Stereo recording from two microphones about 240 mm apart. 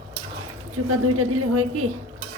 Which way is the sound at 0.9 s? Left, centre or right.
Right.